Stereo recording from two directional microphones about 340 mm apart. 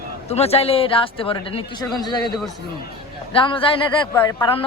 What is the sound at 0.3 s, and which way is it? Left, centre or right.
Speech, centre.